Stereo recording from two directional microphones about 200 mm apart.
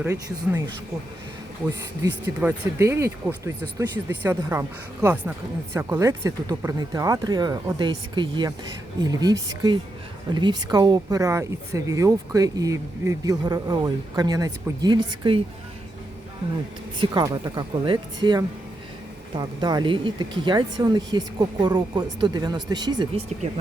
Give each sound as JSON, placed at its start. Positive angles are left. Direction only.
{"t": 0.0, "sound": "speech", "side_deg": -10}
{"t": 2.2, "sound": "speech", "side_deg": -10}
{"t": 17.0, "sound": "speech", "side_deg": -20}